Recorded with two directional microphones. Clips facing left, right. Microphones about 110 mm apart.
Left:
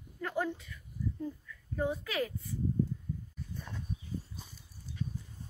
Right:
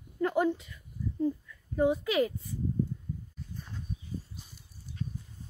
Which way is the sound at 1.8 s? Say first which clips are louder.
Right 7 dB; 15° right (ahead or behind).